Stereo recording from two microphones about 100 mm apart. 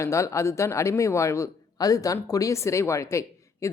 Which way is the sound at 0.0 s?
30° left (ahead or behind).